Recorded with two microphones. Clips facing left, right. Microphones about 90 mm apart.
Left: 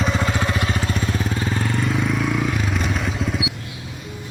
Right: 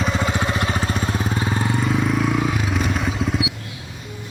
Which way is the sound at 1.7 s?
Centre (ahead or behind).